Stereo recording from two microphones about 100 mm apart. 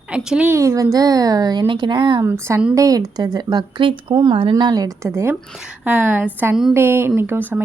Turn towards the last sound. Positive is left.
turn(degrees=-20)  # may be behind; listen again after turning